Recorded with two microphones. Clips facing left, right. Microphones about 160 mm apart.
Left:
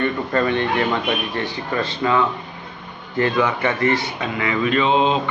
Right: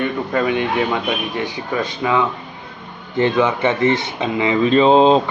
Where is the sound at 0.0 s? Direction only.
10° right (ahead or behind).